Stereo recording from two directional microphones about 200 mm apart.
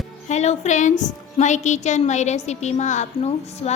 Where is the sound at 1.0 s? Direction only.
35° left (ahead or behind).